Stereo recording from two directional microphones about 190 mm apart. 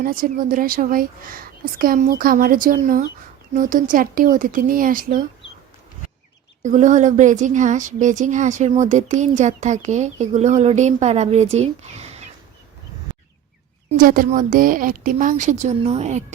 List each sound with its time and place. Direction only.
0.0 s speech: 50° right (ahead or behind)
6.6 s speech: 40° right (ahead or behind)
13.9 s speech: 45° right (ahead or behind)